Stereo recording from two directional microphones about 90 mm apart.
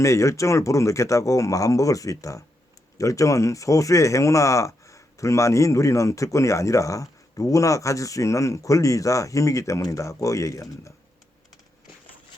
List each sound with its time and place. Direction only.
0.0 s speech: 35° left (ahead or behind)